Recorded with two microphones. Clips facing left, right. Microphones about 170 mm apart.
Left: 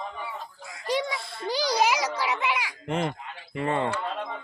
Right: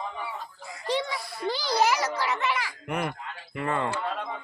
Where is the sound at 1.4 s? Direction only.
15° left (ahead or behind).